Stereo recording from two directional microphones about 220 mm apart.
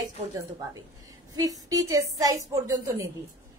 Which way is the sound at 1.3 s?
15° right (ahead or behind).